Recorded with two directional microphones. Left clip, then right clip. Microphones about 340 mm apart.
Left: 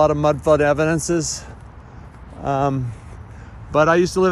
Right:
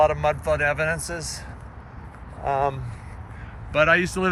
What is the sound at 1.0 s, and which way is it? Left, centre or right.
Speech, centre.